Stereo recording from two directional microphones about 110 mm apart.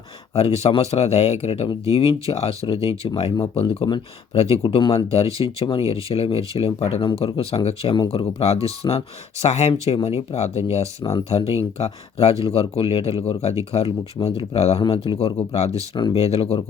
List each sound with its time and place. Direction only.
0.3 s speech: 70° left (ahead or behind); by 4.0 s 50° left (ahead or behind)
4.4 s speech: 70° left (ahead or behind)